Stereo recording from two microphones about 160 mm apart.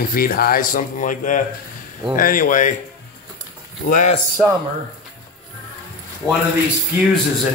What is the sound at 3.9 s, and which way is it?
Speech, 50° left (ahead or behind).